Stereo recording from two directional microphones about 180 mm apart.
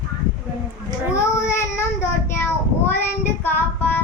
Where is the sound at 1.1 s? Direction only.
15° left (ahead or behind).